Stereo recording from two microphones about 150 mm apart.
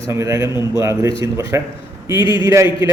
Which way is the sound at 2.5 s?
20° right (ahead or behind).